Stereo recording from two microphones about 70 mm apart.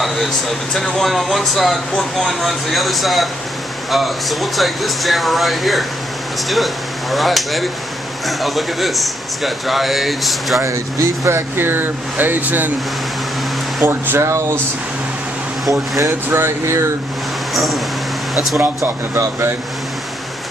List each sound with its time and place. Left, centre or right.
0.0 s a sound: centre
0.7 s speech: centre
10.6 s speech: right
13.8 s speech: right
16.1 s speech: right
17.6 s speech: centre
18.8 s speech: right